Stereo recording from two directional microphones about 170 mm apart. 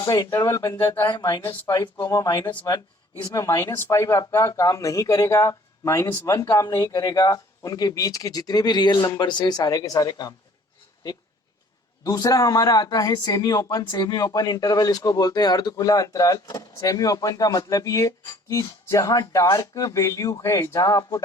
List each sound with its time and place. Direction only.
0.0 s speech: 20° left (ahead or behind)
12.0 s speech: 20° left (ahead or behind)